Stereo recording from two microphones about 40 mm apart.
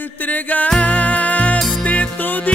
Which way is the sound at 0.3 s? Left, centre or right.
Left.